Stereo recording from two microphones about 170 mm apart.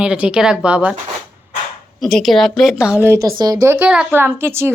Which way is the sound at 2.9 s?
15° right (ahead or behind).